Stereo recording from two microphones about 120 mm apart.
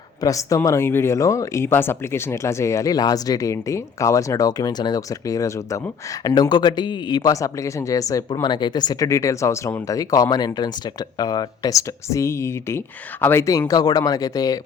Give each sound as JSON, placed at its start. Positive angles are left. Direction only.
{"t": 0.2, "sound": "speech", "side_deg": 30}